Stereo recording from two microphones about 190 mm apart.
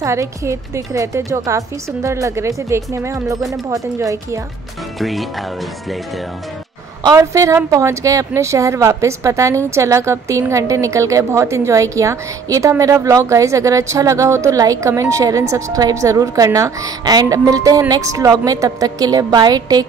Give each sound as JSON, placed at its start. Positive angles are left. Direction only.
{"t": 0.0, "sound": "a woman's voice", "side_deg": -15}
{"t": 4.9, "sound": "speech", "side_deg": 0}
{"t": 7.0, "sound": "a woman's voice", "side_deg": -15}